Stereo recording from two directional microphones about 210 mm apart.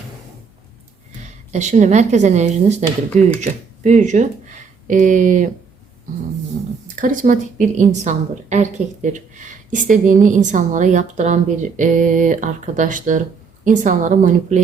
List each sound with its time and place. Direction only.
1.5 s a woman's voice: 35° right (ahead or behind)
6.8 s a woman's voice: 40° right (ahead or behind)